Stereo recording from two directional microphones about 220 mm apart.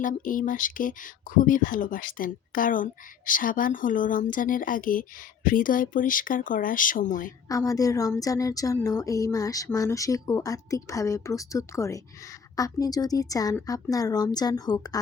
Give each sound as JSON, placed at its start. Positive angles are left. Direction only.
{"t": 0.0, "sound": "speech", "side_deg": 35}
{"t": 7.4, "sound": "speech", "side_deg": 15}